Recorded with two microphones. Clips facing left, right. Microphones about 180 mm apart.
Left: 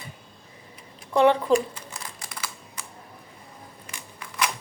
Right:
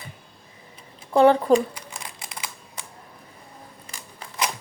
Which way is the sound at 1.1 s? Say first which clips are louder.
Right 3 dB; 35° right (ahead or behind).